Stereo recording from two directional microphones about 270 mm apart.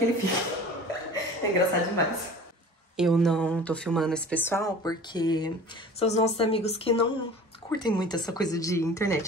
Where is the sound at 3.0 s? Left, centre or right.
Centre.